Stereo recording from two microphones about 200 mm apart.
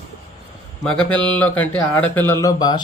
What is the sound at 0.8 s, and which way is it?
Speech, 5° left (ahead or behind).